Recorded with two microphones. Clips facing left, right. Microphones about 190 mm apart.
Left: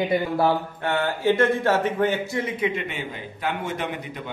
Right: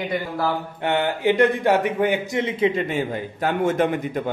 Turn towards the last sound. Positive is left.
turn(degrees=-45)  # may be behind; listen again after turning